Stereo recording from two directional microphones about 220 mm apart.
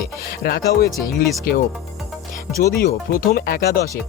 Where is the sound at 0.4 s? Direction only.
45° left (ahead or behind).